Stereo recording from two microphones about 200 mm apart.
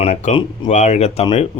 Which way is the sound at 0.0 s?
30° left (ahead or behind).